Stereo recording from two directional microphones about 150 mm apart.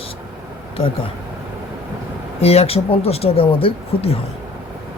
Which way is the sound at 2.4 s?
45° left (ahead or behind).